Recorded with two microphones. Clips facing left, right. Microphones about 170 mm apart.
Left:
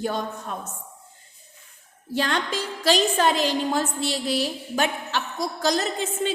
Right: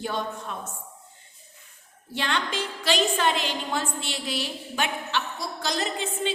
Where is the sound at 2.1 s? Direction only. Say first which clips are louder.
Left 3 dB; 40° left (ahead or behind).